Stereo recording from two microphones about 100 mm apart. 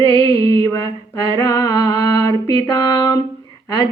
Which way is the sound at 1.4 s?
40° left (ahead or behind).